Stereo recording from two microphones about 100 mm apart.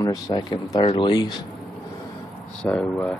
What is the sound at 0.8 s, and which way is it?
Speech, 55° left (ahead or behind).